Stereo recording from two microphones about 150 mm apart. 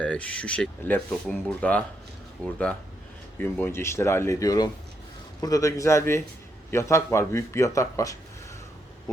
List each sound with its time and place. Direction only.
0.0 s speech: 10° left (ahead or behind)